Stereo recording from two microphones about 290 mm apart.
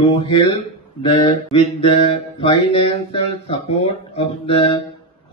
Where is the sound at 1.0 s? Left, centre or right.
Centre.